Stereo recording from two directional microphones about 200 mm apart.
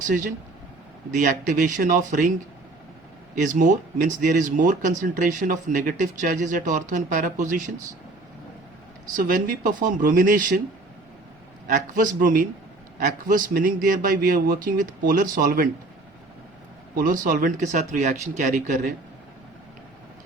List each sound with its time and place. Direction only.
1.1 s speech: 40° right (ahead or behind)
3.3 s speech: 40° right (ahead or behind)
9.1 s speech: 45° right (ahead or behind)
11.7 s speech: 40° right (ahead or behind)
17.0 s speech: 45° right (ahead or behind)